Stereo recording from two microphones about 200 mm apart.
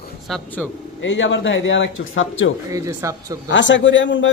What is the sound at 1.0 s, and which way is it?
A man's voice, 65° left (ahead or behind).